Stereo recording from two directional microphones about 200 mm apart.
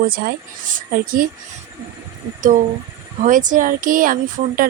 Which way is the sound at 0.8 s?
45° right (ahead or behind).